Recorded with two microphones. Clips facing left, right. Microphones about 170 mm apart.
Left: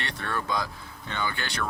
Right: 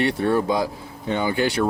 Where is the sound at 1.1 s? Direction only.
10° right (ahead or behind).